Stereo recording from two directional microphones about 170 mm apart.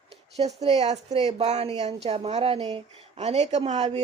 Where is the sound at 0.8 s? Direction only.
40° right (ahead or behind).